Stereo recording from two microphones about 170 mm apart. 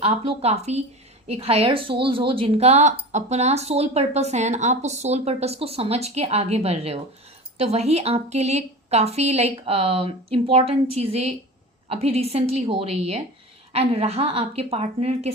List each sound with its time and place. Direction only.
0.0 s a woman's voice: 35° right (ahead or behind)